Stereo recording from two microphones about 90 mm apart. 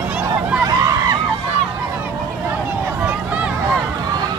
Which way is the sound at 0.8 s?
40° right (ahead or behind).